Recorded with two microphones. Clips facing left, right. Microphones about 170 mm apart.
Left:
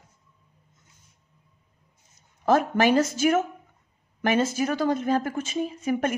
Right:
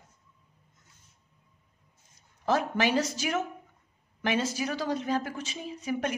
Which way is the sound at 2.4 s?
50° left (ahead or behind).